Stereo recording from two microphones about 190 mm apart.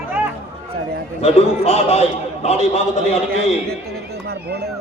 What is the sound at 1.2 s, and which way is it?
Speech, 35° left (ahead or behind).